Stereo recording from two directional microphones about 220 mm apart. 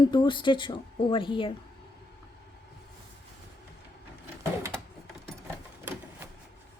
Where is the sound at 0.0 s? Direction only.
20° left (ahead or behind).